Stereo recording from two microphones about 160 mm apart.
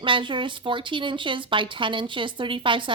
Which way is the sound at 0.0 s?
30° right (ahead or behind).